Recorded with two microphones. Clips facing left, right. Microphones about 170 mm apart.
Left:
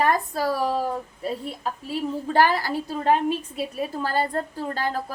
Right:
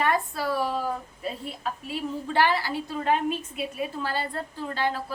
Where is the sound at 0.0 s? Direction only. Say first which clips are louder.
Left 3 dB; 40° left (ahead or behind).